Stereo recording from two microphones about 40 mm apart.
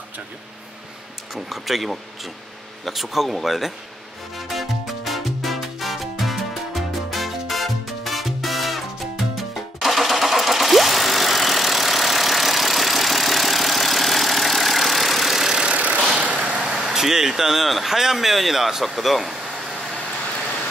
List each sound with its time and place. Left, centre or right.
1.3 s speech: centre
4.4 s music: centre
9.8 s vehicle: centre
15.7 s vehicle: right
16.9 s speech: centre